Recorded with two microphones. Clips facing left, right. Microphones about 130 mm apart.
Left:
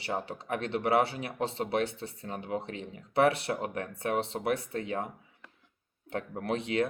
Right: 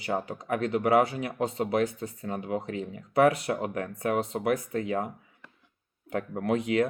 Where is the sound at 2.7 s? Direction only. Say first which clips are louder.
Right 6 dB; 40° right (ahead or behind).